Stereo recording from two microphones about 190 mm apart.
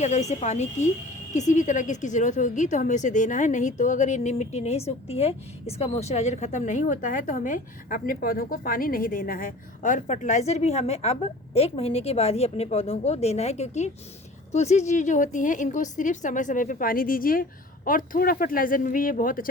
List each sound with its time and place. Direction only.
0.0 s a woman's voice: 35° left (ahead or behind)